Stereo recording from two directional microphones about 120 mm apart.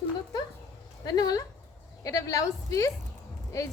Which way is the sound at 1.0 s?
35° left (ahead or behind).